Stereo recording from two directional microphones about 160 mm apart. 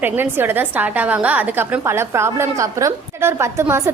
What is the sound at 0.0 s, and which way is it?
A woman's voice, 10° right (ahead or behind).